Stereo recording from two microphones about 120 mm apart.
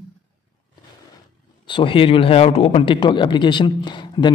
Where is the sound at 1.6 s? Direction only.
45° left (ahead or behind).